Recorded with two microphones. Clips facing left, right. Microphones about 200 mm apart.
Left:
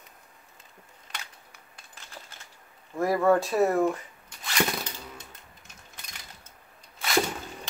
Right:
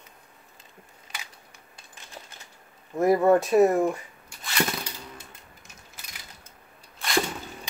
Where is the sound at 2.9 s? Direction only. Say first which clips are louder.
Right 3 dB; 20° right (ahead or behind).